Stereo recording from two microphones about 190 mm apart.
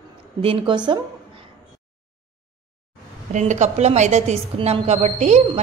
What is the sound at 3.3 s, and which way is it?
A woman's voice, 40° right (ahead or behind).